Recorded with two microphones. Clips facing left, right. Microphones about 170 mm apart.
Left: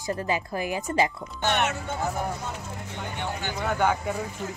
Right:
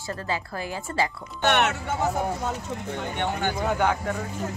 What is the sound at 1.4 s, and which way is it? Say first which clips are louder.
Speech: right 3 dB; 65° right (ahead or behind).